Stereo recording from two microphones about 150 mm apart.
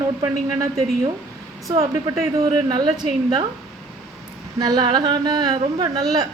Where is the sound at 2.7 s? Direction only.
30° right (ahead or behind).